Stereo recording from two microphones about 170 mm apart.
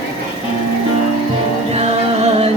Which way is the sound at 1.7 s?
40° right (ahead or behind).